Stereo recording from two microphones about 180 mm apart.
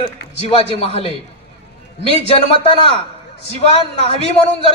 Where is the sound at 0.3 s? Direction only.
35° left (ahead or behind).